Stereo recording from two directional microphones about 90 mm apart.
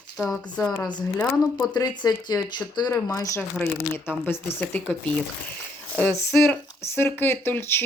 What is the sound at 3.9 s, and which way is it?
Speech, 25° left (ahead or behind).